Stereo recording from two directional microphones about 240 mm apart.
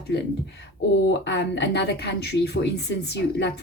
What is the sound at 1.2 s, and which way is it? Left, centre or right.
A woman's voice, left.